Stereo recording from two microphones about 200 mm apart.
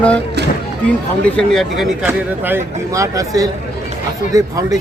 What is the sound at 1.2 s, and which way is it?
Speech, 5° left (ahead or behind).